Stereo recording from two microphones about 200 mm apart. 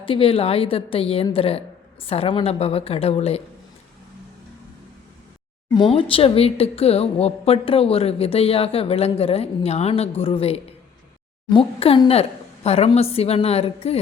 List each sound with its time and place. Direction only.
0.0 s speech: 25° left (ahead or behind)
5.7 s a woman's voice: 25° left (ahead or behind)